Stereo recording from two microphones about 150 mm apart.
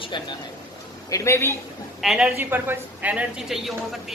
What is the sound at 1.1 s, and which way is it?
Speech, 20° left (ahead or behind).